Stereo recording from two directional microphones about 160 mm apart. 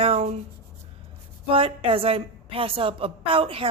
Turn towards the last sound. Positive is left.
turn(degrees=-35)  # may be behind; listen again after turning